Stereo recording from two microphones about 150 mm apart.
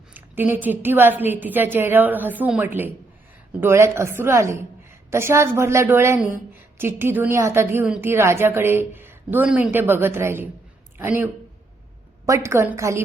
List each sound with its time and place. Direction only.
0.1 s a woman's voice: 15° right (ahead or behind)